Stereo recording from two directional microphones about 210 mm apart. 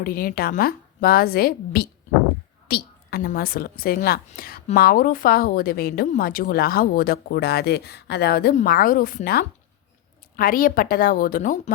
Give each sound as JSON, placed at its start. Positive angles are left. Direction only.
{"t": 0.0, "sound": "a woman's voice", "side_deg": 45}